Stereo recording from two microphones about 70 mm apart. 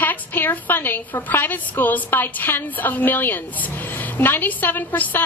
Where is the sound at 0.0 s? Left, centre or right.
Left.